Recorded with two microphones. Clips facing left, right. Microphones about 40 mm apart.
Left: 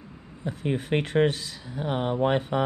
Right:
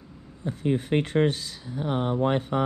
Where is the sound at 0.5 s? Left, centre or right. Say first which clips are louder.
Right 2 dB; left.